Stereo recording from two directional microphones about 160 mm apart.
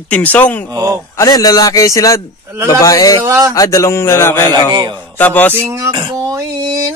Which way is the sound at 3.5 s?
20° left (ahead or behind).